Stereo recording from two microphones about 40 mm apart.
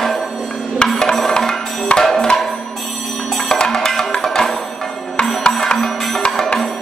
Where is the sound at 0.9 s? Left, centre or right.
Centre.